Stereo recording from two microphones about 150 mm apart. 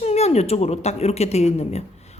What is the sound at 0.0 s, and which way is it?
A woman's voice, 45° left (ahead or behind).